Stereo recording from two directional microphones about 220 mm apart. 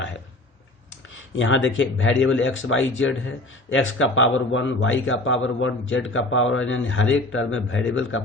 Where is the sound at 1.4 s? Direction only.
60° left (ahead or behind).